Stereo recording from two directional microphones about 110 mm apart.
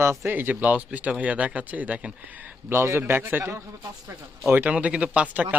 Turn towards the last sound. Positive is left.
turn(degrees=-10)  # may be behind; listen again after turning